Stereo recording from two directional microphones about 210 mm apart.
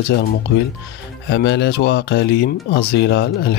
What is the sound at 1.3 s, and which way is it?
Speech, 55° left (ahead or behind).